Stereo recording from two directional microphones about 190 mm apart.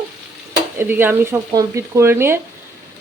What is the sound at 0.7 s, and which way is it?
Speech, 10° right (ahead or behind).